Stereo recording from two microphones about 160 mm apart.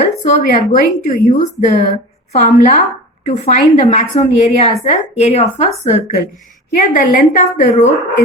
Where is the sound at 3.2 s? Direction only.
45° left (ahead or behind).